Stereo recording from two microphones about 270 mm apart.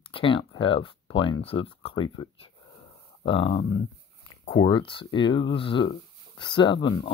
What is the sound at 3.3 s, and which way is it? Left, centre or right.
Speech, centre.